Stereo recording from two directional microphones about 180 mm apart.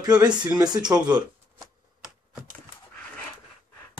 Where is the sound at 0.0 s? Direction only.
20° right (ahead or behind).